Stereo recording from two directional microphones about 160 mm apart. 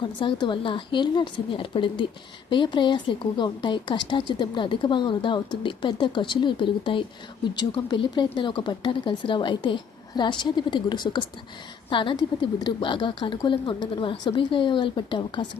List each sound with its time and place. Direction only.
0.0 s a woman's voice: 30° left (ahead or behind)